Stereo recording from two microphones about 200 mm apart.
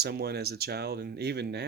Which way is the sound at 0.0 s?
50° right (ahead or behind).